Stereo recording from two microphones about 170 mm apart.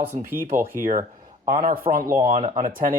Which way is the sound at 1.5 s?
45° right (ahead or behind).